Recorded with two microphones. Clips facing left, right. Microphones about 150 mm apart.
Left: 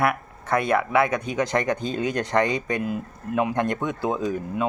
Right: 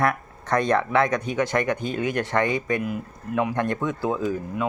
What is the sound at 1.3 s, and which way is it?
Speech, 20° left (ahead or behind).